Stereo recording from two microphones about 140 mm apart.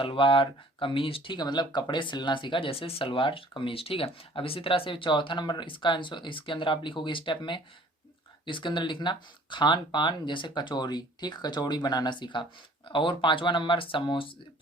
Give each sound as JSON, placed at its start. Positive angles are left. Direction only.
{"t": 0.0, "sound": "speech", "side_deg": 40}